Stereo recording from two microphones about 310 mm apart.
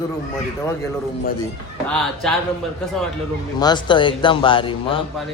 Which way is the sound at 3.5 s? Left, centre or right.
Centre.